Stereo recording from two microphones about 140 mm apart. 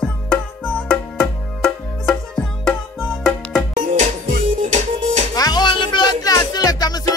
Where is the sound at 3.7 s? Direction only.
65° right (ahead or behind).